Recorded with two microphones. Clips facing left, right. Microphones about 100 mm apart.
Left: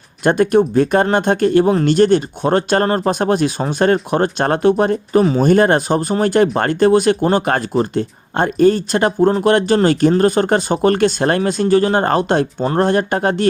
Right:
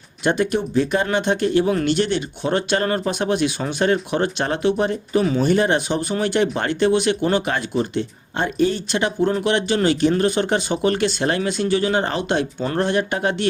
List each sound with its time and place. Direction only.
0.3 s speech: 50° left (ahead or behind)